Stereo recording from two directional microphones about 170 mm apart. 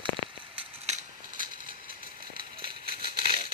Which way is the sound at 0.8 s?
45° right (ahead or behind).